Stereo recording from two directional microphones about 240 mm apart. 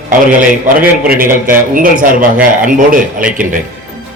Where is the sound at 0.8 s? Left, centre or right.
Right.